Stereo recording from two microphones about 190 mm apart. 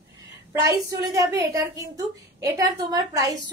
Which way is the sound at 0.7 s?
15° right (ahead or behind).